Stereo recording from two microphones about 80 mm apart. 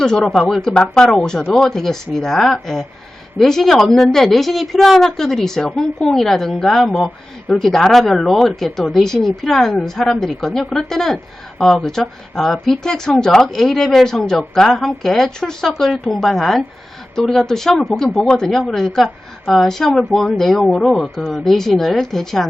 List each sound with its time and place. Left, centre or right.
0.0 s a woman's voice: centre